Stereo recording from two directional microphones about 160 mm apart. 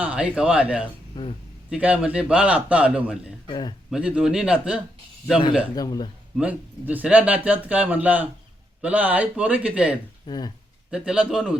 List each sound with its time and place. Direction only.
0.0 s speech: 5° right (ahead or behind)
1.1 s speech: 30° left (ahead or behind)
1.7 s speech: 5° right (ahead or behind)
3.5 s a man's voice: 25° left (ahead or behind)
3.9 s speech: 5° right (ahead or behind)
5.7 s a man's voice: 25° left (ahead or behind)
6.3 s speech: 10° right (ahead or behind)
10.2 s a man's voice: 25° left (ahead or behind)
10.9 s speech: 5° right (ahead or behind)